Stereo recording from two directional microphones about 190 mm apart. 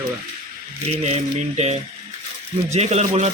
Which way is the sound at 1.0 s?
35° right (ahead or behind).